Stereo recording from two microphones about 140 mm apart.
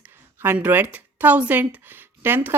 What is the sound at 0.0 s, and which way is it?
A woman's voice, 15° right (ahead or behind).